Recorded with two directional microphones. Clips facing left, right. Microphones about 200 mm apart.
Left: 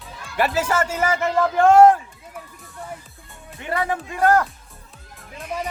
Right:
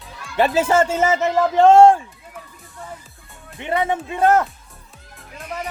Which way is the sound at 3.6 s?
20° right (ahead or behind).